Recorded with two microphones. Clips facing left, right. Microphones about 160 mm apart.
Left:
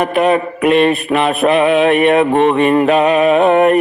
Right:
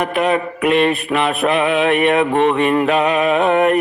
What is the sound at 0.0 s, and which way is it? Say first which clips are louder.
Mantra: left 4 dB; 35° left (ahead or behind).